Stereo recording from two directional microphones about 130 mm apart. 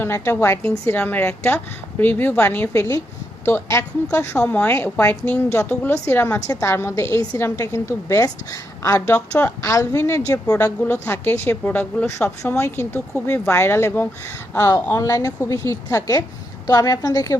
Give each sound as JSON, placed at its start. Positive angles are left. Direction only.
{"t": 0.0, "sound": "a woman's voice", "side_deg": 15}
{"t": 9.1, "sound": "a woman's voice", "side_deg": 10}
{"t": 9.6, "sound": "a woman's voice", "side_deg": 20}
{"t": 10.8, "sound": "a woman's voice", "side_deg": 15}